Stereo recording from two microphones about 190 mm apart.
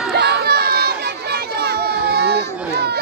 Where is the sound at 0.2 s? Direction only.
60° right (ahead or behind).